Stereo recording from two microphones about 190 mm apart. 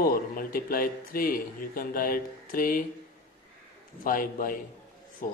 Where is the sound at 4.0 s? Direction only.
45° left (ahead or behind).